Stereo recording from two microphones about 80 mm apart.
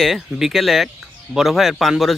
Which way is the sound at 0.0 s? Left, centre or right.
Centre.